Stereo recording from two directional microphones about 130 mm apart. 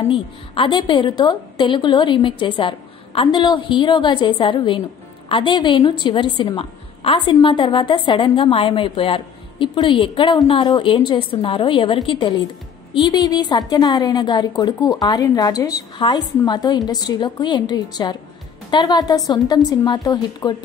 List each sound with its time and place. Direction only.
0.1 s a woman's voice: 40° left (ahead or behind)